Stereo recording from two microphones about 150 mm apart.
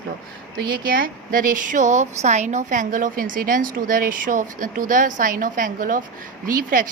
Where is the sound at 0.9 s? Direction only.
75° right (ahead or behind).